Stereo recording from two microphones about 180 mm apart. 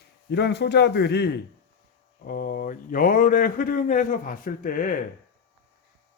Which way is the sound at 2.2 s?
50° left (ahead or behind).